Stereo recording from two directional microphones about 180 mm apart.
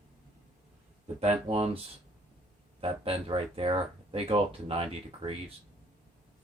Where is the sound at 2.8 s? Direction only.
30° right (ahead or behind).